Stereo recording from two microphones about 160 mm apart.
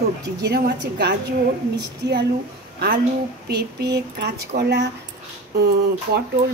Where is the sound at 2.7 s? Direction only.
70° right (ahead or behind).